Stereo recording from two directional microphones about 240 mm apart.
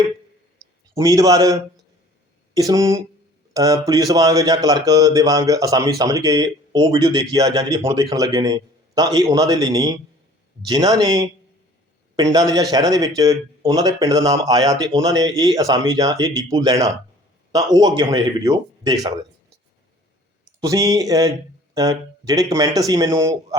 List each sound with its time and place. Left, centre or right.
0.9 s speech: centre
20.6 s speech: centre